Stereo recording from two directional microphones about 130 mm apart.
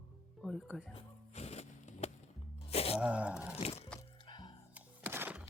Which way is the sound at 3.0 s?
10° right (ahead or behind).